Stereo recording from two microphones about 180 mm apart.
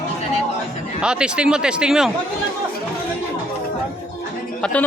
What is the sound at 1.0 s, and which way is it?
Speech, 5° right (ahead or behind).